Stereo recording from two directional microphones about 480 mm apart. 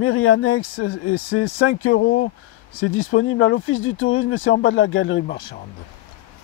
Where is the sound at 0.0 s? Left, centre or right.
Left.